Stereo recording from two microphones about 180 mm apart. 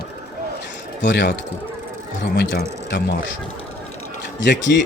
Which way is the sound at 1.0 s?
75° left (ahead or behind).